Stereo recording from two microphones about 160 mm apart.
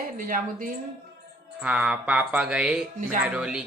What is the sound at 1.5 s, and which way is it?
Speech, 10° right (ahead or behind).